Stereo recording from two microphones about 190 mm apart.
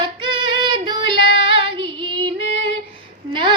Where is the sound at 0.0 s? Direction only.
25° right (ahead or behind).